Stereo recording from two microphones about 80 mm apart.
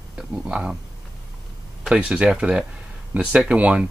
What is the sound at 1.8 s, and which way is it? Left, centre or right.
Speech, centre.